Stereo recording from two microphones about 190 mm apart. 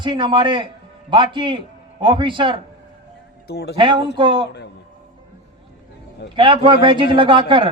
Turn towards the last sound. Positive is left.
turn(degrees=-25)  # may be behind; listen again after turning